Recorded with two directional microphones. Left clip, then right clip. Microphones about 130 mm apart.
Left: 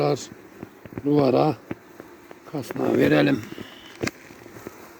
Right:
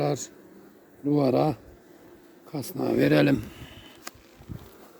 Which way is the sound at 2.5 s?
65° right (ahead or behind).